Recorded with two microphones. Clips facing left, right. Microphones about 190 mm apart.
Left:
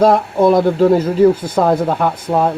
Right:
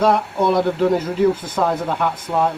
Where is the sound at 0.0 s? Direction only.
40° left (ahead or behind).